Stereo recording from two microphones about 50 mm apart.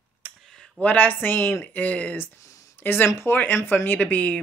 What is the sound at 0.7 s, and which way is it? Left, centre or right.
Speech, left.